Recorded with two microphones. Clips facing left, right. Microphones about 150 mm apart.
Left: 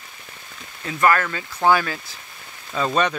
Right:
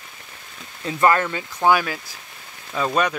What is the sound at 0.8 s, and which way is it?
Speech, 20° right (ahead or behind).